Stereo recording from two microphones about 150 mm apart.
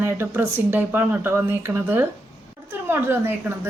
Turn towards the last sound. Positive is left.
turn(degrees=-15)  # may be behind; listen again after turning